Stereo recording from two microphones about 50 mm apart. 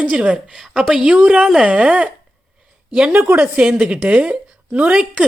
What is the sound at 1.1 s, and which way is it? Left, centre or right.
Speech, right.